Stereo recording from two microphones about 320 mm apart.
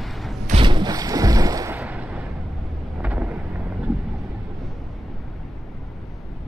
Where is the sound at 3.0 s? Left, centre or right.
Centre.